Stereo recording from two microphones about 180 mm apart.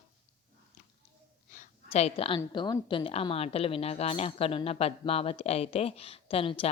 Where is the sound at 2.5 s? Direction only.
25° left (ahead or behind).